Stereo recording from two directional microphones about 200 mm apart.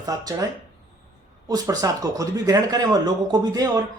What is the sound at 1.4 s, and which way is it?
Speech, 20° right (ahead or behind).